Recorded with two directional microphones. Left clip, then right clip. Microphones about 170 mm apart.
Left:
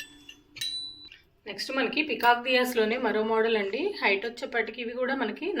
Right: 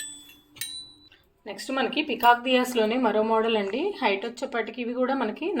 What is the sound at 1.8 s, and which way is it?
Speech, centre (ahead or behind).